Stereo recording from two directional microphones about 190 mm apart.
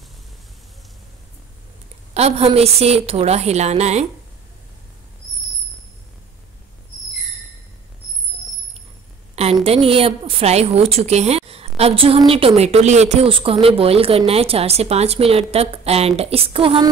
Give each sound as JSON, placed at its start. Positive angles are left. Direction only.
{"t": 2.1, "sound": "a woman's voice", "side_deg": -35}
{"t": 9.3, "sound": "a woman's voice", "side_deg": -35}